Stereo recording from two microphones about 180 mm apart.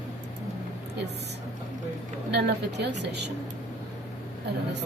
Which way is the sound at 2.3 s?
65° right (ahead or behind).